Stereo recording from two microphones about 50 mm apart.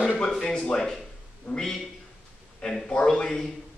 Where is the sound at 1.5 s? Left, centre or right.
Left.